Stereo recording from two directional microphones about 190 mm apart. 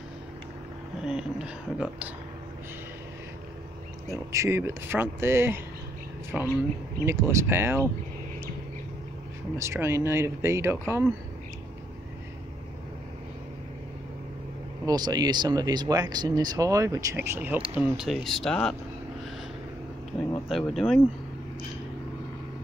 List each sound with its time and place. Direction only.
1.0 s speech: 5° right (ahead or behind)
4.3 s speech: 15° right (ahead or behind)
9.6 s speech: 15° right (ahead or behind)
14.9 s speech: 20° right (ahead or behind); by 18.8 s 5° left (ahead or behind)
20.4 s speech: centre (ahead or behind)